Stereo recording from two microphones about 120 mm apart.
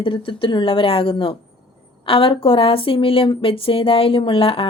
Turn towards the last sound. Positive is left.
turn(degrees=50)  # may be behind; listen again after turning